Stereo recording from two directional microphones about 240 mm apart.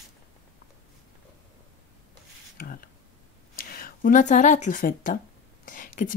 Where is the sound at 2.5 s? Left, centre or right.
Left.